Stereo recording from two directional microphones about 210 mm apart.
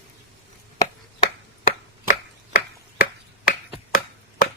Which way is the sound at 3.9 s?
40° left (ahead or behind).